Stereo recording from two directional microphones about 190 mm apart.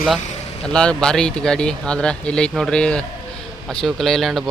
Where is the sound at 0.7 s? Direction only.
5° left (ahead or behind).